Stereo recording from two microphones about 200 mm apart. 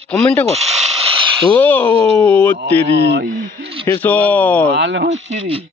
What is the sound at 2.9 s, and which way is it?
Speech, 60° right (ahead or behind).